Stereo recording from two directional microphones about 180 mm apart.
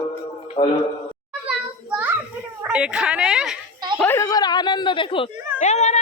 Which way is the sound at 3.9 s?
10° left (ahead or behind).